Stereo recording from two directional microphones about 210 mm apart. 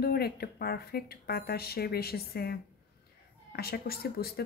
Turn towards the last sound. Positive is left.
turn(degrees=50)  # may be behind; listen again after turning